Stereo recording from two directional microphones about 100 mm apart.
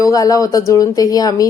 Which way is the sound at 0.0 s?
35° left (ahead or behind).